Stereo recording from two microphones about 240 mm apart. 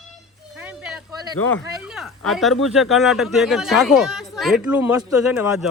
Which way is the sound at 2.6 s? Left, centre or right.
Centre.